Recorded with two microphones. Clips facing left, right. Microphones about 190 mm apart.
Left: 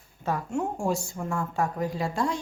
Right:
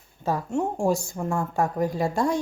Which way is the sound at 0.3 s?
35° right (ahead or behind).